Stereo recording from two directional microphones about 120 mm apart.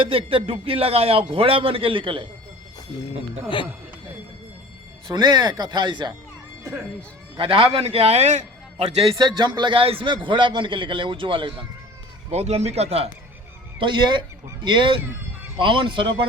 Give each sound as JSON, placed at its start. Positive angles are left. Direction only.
{"t": 0.0, "sound": "a man's voice", "side_deg": -50}
{"t": 5.0, "sound": "speech", "side_deg": -35}
{"t": 7.3, "sound": "a man's voice", "side_deg": -50}
{"t": 9.1, "sound": "a man's voice", "side_deg": -35}
{"t": 12.3, "sound": "a man's voice", "side_deg": -60}
{"t": 13.7, "sound": "a man's voice", "side_deg": -40}